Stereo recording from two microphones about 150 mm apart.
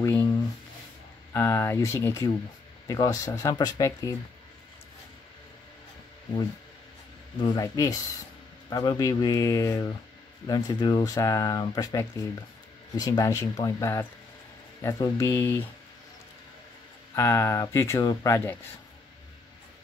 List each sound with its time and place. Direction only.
0.0 s a sound: 15° left (ahead or behind)
1.3 s speech: 15° left (ahead or behind)
7.5 s speech: 25° left (ahead or behind)
17.1 s speech: 20° left (ahead or behind)